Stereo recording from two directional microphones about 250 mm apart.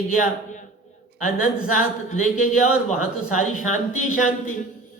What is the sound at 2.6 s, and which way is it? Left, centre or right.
Speech, centre.